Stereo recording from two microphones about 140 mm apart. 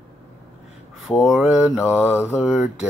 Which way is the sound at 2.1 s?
15° left (ahead or behind).